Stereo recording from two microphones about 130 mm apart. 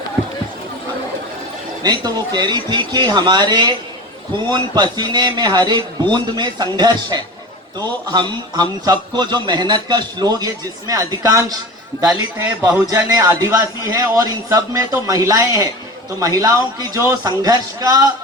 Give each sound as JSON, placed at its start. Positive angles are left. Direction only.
{"t": 1.8, "sound": "a man's voice", "side_deg": -30}
{"t": 12.8, "sound": "a man's voice", "side_deg": -30}